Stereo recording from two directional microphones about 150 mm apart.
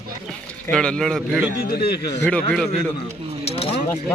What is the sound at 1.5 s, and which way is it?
Speech, 85° left.